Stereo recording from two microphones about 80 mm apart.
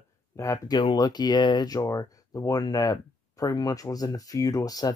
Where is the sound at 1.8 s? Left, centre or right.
Left.